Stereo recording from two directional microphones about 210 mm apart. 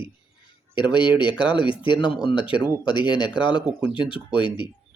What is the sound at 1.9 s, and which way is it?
Speech, 5° right (ahead or behind).